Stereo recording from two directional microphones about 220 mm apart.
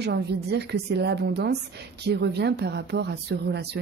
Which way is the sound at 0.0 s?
50° right (ahead or behind).